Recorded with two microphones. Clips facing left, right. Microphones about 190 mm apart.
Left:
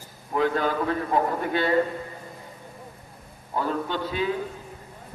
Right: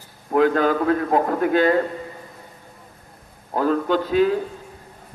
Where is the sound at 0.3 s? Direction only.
50° right (ahead or behind).